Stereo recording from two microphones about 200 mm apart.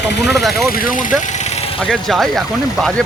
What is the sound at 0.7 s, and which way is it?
Speech, 45° left (ahead or behind).